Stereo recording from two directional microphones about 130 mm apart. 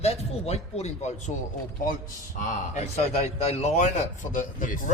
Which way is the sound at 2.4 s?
65° left (ahead or behind).